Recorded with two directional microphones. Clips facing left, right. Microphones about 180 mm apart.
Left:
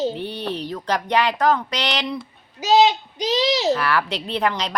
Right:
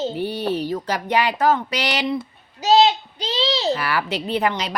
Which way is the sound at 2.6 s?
15° left (ahead or behind).